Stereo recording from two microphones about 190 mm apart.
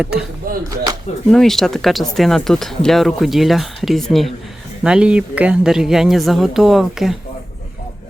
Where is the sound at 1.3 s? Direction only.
Centre (ahead or behind).